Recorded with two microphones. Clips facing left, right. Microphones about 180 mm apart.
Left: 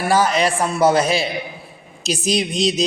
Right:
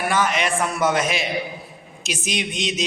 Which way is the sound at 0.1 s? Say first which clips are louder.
Left 7 dB; 35° left (ahead or behind).